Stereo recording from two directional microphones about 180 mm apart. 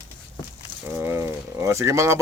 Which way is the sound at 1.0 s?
15° right (ahead or behind).